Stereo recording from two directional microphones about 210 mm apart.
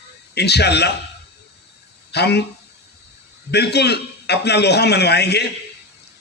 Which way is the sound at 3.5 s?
50° left (ahead or behind).